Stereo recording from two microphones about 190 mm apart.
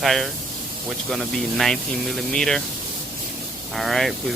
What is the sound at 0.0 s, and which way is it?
Speech, centre (ahead or behind).